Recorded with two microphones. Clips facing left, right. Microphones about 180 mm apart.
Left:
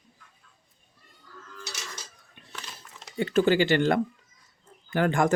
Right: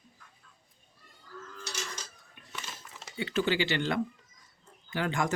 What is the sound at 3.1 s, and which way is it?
Speech, 45° left (ahead or behind).